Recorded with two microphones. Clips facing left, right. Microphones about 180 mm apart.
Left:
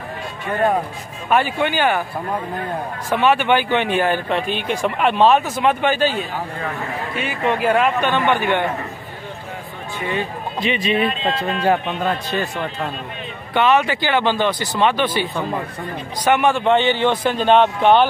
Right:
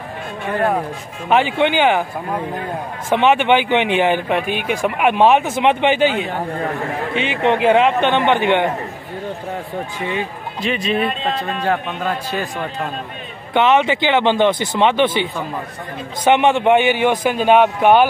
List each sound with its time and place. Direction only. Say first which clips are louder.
1.3 s speech: right 3 dB; 20° right (ahead or behind)
10.6 s speech: even; centre (ahead or behind)
13.5 s speech: right 2 dB; 20° right (ahead or behind)
16.3 s speech: right 3 dB; 25° right (ahead or behind)